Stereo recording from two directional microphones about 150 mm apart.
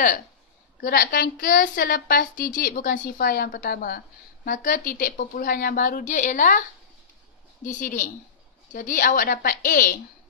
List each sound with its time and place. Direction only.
0.8 s a woman's voice: 80° left
4.5 s a woman's voice: 65° left (ahead or behind)
7.6 s a woman's voice: 60° left (ahead or behind)